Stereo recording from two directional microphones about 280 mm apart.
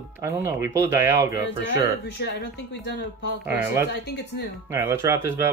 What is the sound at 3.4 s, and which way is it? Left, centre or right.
Speech, centre.